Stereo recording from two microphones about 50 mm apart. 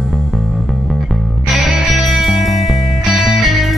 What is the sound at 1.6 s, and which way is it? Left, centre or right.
Music, centre.